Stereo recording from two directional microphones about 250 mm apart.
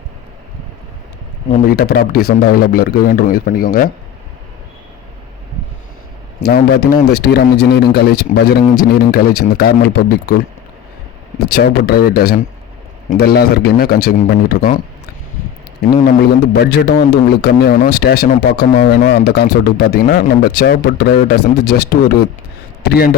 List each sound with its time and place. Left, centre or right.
1.5 s speech: left
1.8 s a man's voice: left
6.4 s a man's voice: left
11.5 s a man's voice: left
15.9 s a man's voice: left